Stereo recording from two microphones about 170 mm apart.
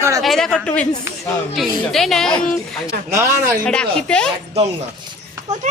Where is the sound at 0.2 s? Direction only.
Centre (ahead or behind).